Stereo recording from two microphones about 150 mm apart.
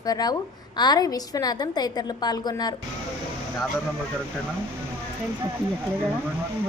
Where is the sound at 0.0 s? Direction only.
25° left (ahead or behind).